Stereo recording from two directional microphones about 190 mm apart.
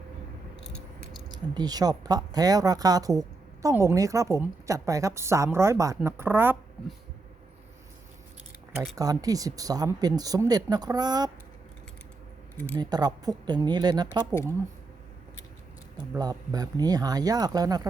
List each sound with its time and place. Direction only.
1.3 s a woman's voice: 20° right (ahead or behind)
9.0 s speech: 20° right (ahead or behind)
12.5 s speech: 10° left (ahead or behind)
12.8 s speech: 20° right (ahead or behind)
16.1 s speech: 20° right (ahead or behind)